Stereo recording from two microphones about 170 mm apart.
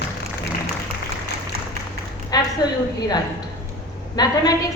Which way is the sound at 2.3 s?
25° left (ahead or behind).